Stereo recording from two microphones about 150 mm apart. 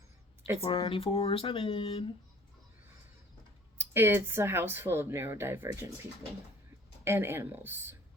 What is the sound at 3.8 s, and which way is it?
Speech, 15° right (ahead or behind).